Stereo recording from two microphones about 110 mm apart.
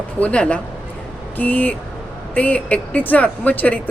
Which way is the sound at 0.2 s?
10° left (ahead or behind).